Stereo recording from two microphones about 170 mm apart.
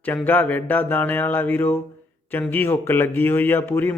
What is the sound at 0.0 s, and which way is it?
Speech, 10° left (ahead or behind).